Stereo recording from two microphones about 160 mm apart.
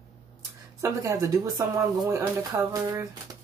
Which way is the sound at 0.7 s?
20° right (ahead or behind).